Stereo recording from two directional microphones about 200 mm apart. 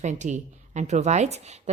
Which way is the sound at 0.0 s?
35° right (ahead or behind).